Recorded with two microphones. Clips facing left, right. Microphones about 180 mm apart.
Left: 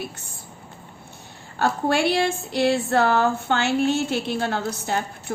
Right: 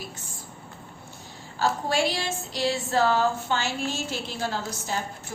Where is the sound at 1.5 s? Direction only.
60° left (ahead or behind).